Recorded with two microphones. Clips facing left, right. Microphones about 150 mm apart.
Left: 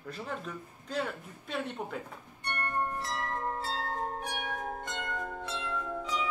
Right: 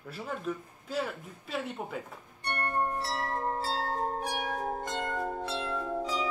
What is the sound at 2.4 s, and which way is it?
Music, 30° right (ahead or behind).